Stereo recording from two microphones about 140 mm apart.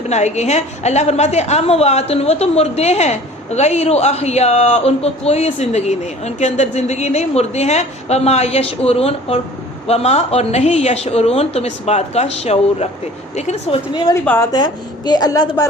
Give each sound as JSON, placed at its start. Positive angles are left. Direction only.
{"t": 0.1, "sound": "a woman's voice", "side_deg": 55}
{"t": 14.1, "sound": "a woman's voice", "side_deg": 20}
{"t": 14.5, "sound": "a woman's voice", "side_deg": 30}